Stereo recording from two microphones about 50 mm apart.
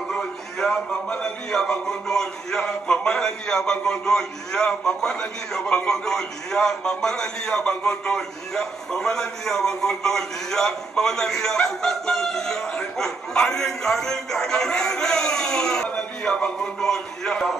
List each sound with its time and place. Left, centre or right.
0.1 s a man's voice: centre
15.9 s a sound: centre
16.8 s a man's voice: centre